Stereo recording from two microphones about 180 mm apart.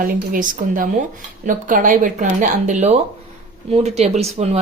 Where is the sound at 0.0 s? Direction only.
50° right (ahead or behind).